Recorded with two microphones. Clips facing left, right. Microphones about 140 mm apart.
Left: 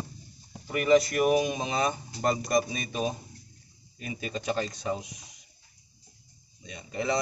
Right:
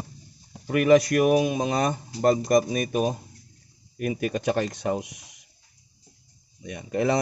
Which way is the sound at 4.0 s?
65° right (ahead or behind).